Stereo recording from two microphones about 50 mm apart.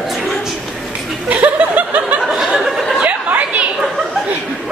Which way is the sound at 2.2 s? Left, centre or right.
Centre.